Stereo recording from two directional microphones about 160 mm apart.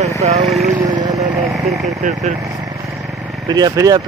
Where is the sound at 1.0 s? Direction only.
45° right (ahead or behind).